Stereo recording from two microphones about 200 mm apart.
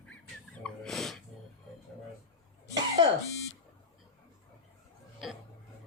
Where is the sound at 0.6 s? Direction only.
Centre (ahead or behind).